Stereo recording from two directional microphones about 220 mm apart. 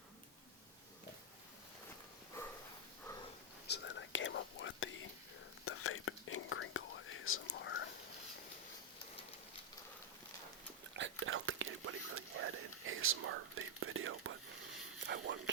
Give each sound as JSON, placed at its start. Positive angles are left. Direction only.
{"t": 3.7, "sound": "whispering", "side_deg": 55}
{"t": 5.6, "sound": "whispering", "side_deg": 75}
{"t": 10.9, "sound": "whispering", "side_deg": -60}
{"t": 15.0, "sound": "whispering", "side_deg": -50}